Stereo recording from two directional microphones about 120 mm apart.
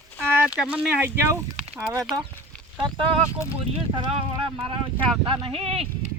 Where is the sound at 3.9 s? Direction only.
45° right (ahead or behind).